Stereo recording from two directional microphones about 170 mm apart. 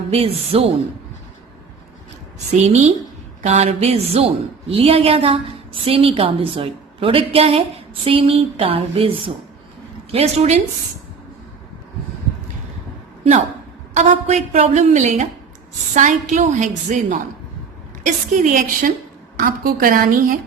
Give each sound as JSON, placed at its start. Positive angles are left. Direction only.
{"t": 0.1, "sound": "a woman's voice", "side_deg": -35}
{"t": 2.5, "sound": "a woman's voice", "side_deg": -40}
{"t": 13.9, "sound": "a woman's voice", "side_deg": -45}